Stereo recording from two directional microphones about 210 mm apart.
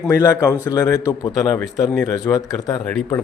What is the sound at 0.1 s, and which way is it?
Speech, 15° left (ahead or behind).